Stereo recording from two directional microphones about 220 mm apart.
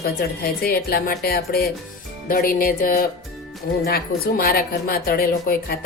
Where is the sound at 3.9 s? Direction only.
45° left (ahead or behind).